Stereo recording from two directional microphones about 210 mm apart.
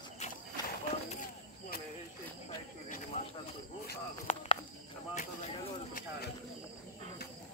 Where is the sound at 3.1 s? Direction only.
35° left (ahead or behind).